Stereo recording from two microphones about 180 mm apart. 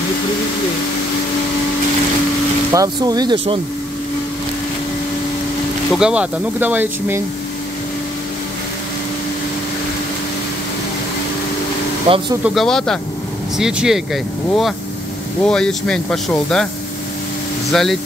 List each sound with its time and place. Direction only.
2.7 s speech: 20° right (ahead or behind)
5.9 s speech: 5° right (ahead or behind)
12.1 s speech: 30° right (ahead or behind)
12.4 s speech: centre (ahead or behind)
17.7 s speech: centre (ahead or behind)